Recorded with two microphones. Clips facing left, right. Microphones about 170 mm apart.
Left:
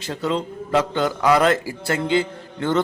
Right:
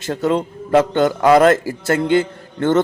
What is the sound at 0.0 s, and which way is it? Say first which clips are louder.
A man's voice: right 5 dB; 50° right (ahead or behind).